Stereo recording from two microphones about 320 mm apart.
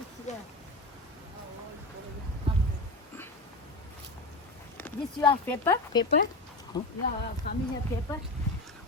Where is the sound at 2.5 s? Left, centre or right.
Centre.